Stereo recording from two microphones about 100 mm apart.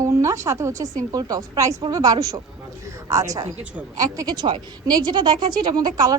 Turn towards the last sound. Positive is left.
turn(degrees=-40)  # may be behind; listen again after turning